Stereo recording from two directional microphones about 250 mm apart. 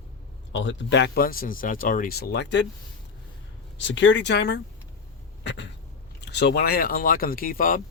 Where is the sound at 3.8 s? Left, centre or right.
Left.